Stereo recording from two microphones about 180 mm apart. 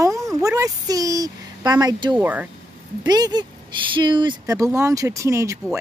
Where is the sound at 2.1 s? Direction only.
10° right (ahead or behind).